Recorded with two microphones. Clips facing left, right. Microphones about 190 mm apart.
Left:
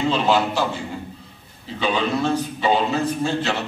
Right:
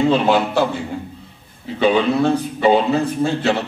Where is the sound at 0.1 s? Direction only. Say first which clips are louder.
Right 4 dB; 55° right (ahead or behind).